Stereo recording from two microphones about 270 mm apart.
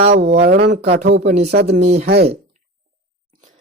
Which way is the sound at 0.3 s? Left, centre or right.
Right.